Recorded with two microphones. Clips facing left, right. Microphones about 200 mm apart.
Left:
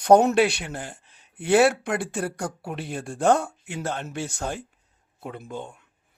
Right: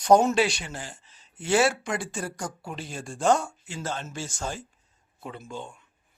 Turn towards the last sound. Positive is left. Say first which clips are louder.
# left 3 dB
turn(degrees=55)  # may be behind; listen again after turning